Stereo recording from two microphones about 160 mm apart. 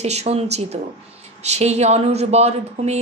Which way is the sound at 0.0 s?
40° right (ahead or behind).